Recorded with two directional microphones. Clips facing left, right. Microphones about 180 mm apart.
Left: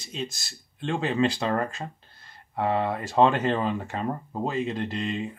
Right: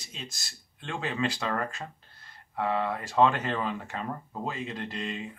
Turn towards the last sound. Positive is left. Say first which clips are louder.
# left 6 dB
turn(degrees=30)  # may be behind; listen again after turning